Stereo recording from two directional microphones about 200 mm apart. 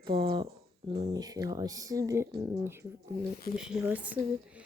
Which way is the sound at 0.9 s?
20° right (ahead or behind).